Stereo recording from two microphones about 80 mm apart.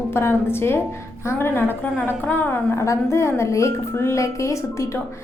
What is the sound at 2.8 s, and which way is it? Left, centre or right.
A woman's voice, left.